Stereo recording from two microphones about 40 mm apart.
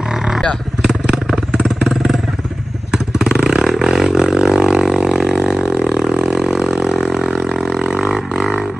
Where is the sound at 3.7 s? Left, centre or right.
Centre.